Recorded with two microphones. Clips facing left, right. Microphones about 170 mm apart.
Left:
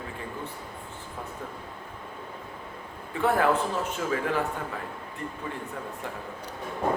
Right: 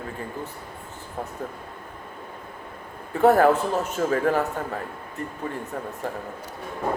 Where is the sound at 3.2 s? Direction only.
45° right (ahead or behind).